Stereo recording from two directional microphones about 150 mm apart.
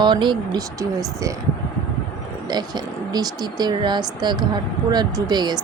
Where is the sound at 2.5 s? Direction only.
25° right (ahead or behind).